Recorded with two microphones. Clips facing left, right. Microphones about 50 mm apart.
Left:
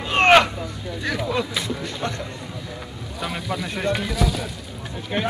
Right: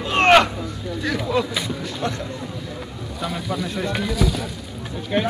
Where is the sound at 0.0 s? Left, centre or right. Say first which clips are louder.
Even; centre.